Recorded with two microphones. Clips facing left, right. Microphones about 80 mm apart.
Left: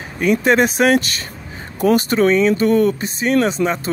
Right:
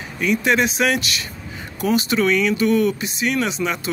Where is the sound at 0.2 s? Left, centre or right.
Left.